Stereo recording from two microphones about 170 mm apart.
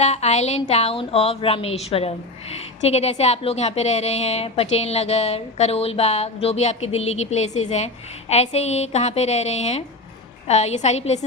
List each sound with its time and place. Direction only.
0.0 s a woman's voice: 40° left (ahead or behind)